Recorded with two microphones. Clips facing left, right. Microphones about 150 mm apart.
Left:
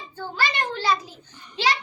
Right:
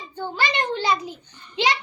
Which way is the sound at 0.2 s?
20° right (ahead or behind).